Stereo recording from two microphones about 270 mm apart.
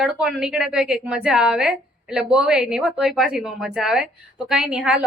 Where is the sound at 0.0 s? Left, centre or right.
Centre.